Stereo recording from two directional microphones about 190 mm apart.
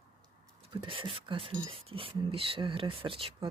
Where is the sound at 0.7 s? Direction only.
25° right (ahead or behind).